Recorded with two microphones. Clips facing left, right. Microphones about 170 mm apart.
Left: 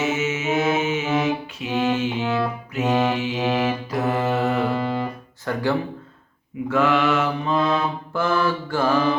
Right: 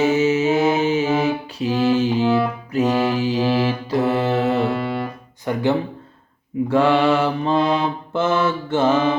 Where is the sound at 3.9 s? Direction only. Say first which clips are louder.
Right 4 dB; 30° right (ahead or behind).